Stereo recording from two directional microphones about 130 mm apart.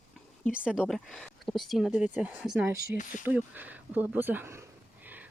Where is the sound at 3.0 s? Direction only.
85° left.